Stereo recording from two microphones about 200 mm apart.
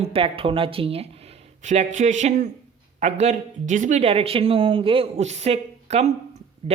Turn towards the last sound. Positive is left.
turn(degrees=-25)  # may be behind; listen again after turning